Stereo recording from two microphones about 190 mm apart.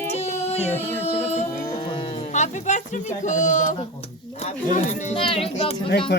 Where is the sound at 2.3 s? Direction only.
35° left (ahead or behind).